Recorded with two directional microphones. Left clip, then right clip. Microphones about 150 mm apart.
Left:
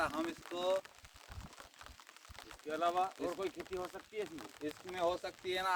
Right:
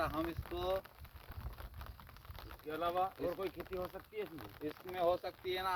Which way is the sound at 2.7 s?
15° left (ahead or behind).